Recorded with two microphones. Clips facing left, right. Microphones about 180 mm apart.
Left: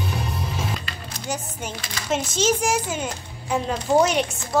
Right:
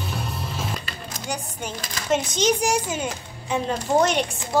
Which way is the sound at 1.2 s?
5° left (ahead or behind).